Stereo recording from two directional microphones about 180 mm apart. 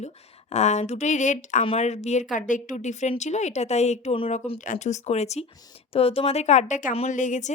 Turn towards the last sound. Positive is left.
turn(degrees=45)  # may be behind; listen again after turning